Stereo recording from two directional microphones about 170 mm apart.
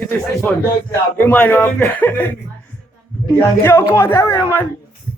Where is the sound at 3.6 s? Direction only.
15° left (ahead or behind).